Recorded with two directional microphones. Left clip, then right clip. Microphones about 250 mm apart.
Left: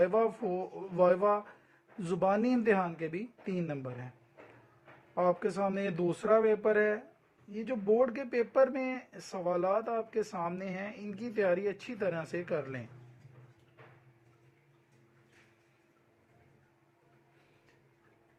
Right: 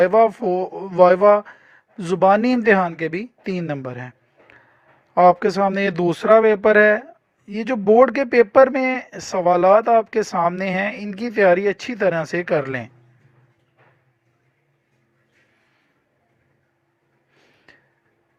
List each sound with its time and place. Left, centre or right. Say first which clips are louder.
0.0 s speech: right 14 dB; right
5.1 s speech: right 16 dB; right
17.7 s a sound: right 16 dB; right